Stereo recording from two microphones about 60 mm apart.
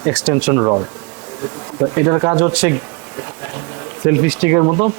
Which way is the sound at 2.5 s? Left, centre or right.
Centre.